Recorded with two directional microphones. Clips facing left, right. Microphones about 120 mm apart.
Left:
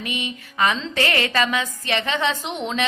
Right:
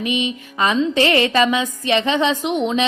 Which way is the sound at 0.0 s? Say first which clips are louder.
Right 8 dB; 20° right (ahead or behind).